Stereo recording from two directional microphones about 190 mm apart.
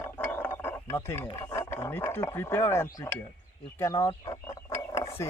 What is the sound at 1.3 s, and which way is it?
Speech, 15° left (ahead or behind).